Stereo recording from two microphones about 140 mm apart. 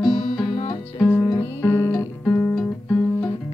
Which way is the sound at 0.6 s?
45° left (ahead or behind).